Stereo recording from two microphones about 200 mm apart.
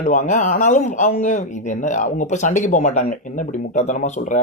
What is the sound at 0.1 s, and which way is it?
Speech, 40° left (ahead or behind).